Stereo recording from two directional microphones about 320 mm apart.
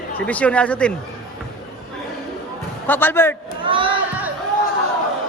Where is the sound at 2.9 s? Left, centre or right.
Centre.